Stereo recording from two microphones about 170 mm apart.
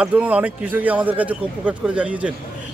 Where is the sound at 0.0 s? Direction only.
5° right (ahead or behind).